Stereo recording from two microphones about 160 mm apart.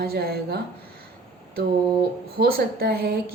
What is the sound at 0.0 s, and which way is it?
Speech, 75° right (ahead or behind).